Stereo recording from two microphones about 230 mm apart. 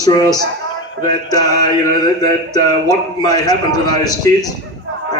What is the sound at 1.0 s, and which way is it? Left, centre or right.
Speech, centre.